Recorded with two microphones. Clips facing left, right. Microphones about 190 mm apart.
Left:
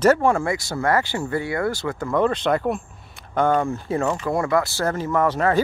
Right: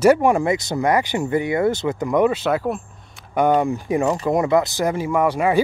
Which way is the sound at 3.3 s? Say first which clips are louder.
Right 3 dB; 15° right (ahead or behind).